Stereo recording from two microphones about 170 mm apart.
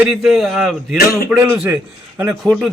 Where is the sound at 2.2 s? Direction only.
Centre (ahead or behind).